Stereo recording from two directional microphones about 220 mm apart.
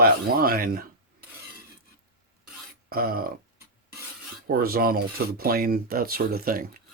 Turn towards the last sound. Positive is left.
turn(degrees=-40)  # may be behind; listen again after turning